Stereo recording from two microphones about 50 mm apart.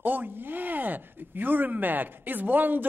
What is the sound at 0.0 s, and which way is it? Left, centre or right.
A man's voice, right.